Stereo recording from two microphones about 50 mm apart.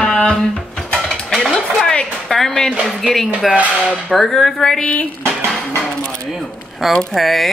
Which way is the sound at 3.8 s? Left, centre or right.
Centre.